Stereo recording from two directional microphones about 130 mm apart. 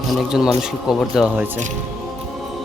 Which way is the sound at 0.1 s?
5° right (ahead or behind).